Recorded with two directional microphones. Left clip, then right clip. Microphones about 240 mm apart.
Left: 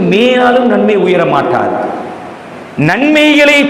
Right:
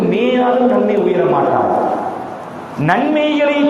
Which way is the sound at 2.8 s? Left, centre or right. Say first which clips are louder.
Left 5 dB; left.